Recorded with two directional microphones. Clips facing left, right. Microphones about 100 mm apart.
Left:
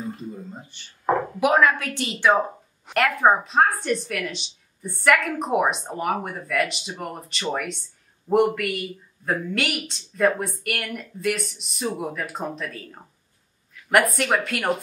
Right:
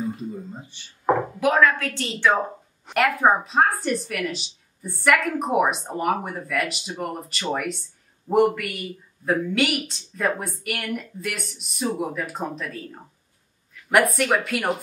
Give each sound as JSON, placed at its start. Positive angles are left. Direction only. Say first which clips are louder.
{"t": 0.0, "sound": "speech", "louder": "right 3 dB", "side_deg": -5}
{"t": 1.4, "sound": "a woman's voice", "louder": "left 2 dB", "side_deg": 15}
{"t": 2.8, "sound": "speech", "louder": "even", "side_deg": 0}
{"t": 13.8, "sound": "speech", "louder": "right 1 dB", "side_deg": 0}